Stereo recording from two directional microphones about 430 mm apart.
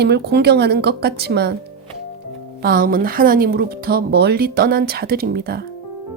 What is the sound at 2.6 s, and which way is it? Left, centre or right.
Speech, centre.